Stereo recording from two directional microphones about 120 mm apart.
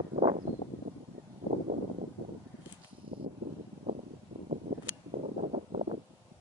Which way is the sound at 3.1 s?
50° right (ahead or behind).